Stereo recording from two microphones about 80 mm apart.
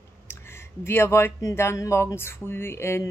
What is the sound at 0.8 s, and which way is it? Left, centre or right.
Speech, left.